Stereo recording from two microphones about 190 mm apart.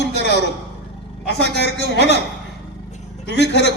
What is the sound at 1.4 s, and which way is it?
Speech, 65° left (ahead or behind).